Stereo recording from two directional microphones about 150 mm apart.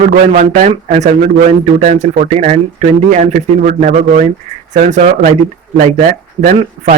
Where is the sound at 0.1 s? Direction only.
50° right (ahead or behind).